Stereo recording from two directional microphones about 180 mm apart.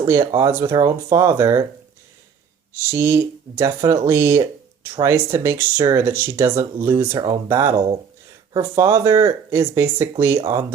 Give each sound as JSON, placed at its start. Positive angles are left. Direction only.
{"t": 0.0, "sound": "speech", "side_deg": -15}
{"t": 2.7, "sound": "speech", "side_deg": -15}